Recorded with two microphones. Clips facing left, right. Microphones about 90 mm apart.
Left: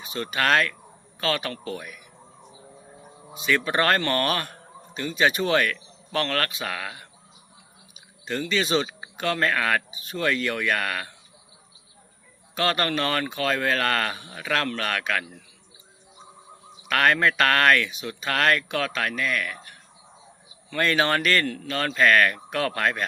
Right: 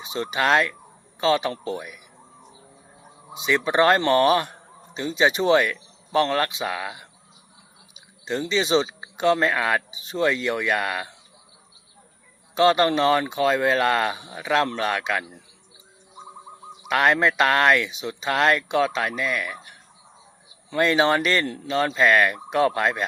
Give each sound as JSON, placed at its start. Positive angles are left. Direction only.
{"t": 0.0, "sound": "speech", "side_deg": -20}
{"t": 3.3, "sound": "speech", "side_deg": -15}
{"t": 12.5, "sound": "speech", "side_deg": -20}
{"t": 16.9, "sound": "speech", "side_deg": -15}
{"t": 20.7, "sound": "speech", "side_deg": -15}